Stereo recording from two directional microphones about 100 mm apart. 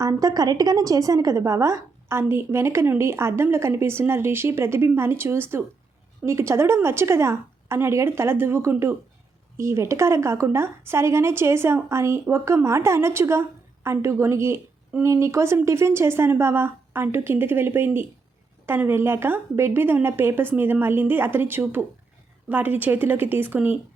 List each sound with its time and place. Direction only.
0.0 s a woman's voice: 35° right (ahead or behind)